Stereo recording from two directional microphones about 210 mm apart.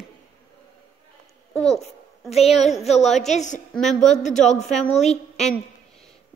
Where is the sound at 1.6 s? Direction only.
30° left (ahead or behind).